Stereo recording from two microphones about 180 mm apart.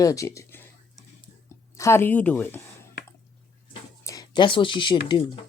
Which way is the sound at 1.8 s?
15° left (ahead or behind).